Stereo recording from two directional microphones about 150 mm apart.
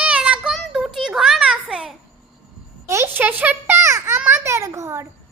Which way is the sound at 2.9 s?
15° right (ahead or behind).